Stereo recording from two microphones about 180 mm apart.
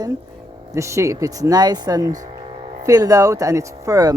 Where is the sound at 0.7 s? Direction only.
15° right (ahead or behind).